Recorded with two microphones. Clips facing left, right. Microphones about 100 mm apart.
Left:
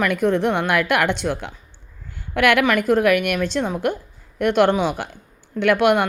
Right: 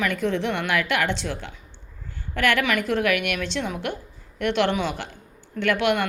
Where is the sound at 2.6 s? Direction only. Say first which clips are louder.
Left 6 dB; 45° left (ahead or behind).